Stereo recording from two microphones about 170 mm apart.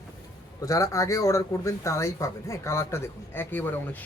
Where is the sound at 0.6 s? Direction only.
20° left (ahead or behind).